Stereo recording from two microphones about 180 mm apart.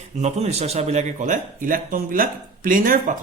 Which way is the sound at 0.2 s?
40° right (ahead or behind).